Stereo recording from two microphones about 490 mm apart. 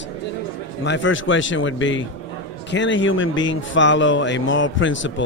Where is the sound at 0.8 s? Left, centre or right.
Left.